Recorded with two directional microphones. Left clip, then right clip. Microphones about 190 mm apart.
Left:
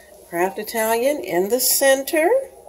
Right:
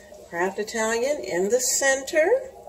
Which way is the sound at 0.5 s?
55° left (ahead or behind).